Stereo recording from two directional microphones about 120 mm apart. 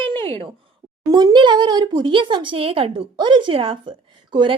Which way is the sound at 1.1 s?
35° right (ahead or behind).